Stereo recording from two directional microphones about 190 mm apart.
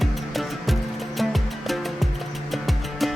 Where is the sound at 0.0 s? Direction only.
Centre (ahead or behind).